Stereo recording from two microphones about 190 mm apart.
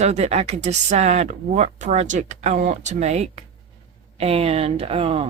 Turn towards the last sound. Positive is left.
turn(degrees=-30)  # may be behind; listen again after turning